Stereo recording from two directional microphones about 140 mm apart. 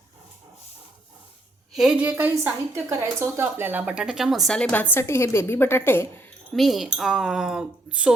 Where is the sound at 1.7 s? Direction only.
5° right (ahead or behind).